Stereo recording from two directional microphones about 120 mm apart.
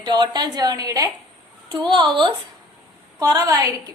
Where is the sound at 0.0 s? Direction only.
40° right (ahead or behind).